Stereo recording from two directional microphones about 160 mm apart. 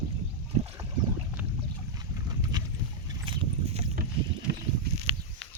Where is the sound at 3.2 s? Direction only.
35° right (ahead or behind).